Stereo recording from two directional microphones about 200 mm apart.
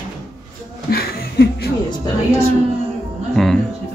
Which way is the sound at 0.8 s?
50° left (ahead or behind).